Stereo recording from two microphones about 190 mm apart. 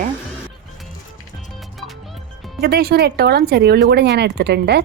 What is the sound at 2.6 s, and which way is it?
Speech, 55° right (ahead or behind).